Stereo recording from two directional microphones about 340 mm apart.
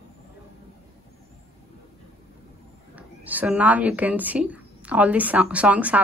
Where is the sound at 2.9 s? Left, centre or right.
Centre.